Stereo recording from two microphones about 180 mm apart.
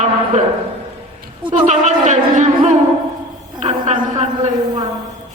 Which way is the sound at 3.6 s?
40° right (ahead or behind).